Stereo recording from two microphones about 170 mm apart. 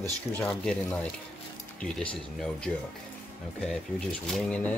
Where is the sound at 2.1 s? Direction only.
5° left (ahead or behind).